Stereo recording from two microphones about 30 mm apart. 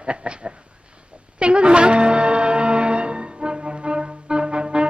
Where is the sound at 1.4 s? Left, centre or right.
Right.